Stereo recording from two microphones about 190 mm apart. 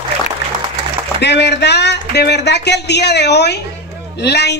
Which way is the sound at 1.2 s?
65° left (ahead or behind).